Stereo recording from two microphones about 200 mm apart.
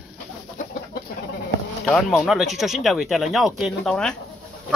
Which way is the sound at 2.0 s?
Centre (ahead or behind).